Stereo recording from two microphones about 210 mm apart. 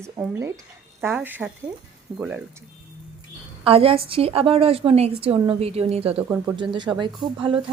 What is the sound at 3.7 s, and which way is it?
A woman's voice, 25° right (ahead or behind).